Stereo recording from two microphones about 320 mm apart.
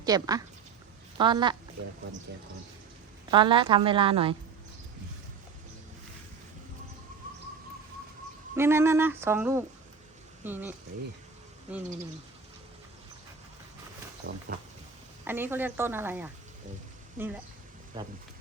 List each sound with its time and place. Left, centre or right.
0.0 s a woman's voice: centre
3.3 s speech: centre
8.5 s speech: centre
14.2 s speech: right
15.2 s speech: centre
18.0 s speech: centre